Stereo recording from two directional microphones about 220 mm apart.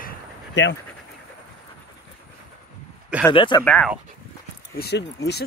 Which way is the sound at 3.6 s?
5° left (ahead or behind).